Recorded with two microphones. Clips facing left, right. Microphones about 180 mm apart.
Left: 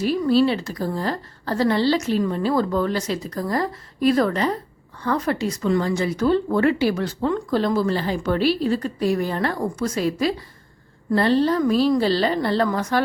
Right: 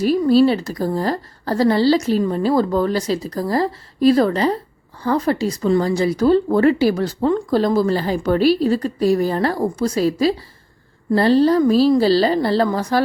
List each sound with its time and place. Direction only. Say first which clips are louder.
0.0 s speech: right 4 dB; 40° right (ahead or behind)